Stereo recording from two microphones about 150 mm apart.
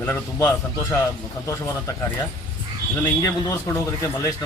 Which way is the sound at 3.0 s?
20° left (ahead or behind).